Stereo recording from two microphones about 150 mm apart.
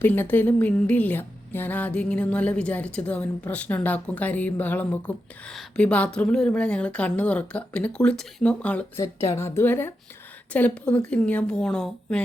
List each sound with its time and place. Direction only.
0.0 s speech: 15° left (ahead or behind)